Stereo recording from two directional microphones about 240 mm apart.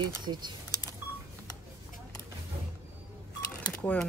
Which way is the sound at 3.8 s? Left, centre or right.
Centre.